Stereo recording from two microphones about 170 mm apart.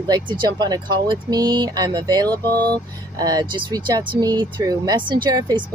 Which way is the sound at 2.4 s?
10° left (ahead or behind).